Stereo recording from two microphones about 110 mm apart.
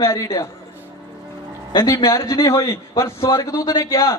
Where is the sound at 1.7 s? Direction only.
30° left (ahead or behind).